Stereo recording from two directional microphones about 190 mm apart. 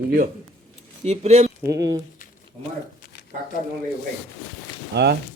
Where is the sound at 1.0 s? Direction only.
35° right (ahead or behind).